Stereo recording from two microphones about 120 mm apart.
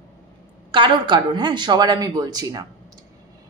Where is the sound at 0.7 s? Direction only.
40° right (ahead or behind).